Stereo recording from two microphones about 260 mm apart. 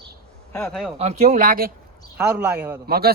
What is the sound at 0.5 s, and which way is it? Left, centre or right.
Speech, centre.